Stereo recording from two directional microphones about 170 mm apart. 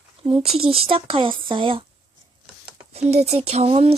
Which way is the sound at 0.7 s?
35° right (ahead or behind).